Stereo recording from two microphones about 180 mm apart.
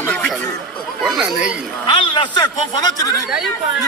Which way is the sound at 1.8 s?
25° left (ahead or behind).